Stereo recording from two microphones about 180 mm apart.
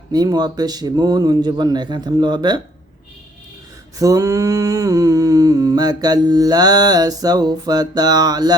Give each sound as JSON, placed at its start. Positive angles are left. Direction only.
{"t": 0.1, "sound": "humming", "side_deg": -20}
{"t": 3.9, "sound": "humming", "side_deg": -20}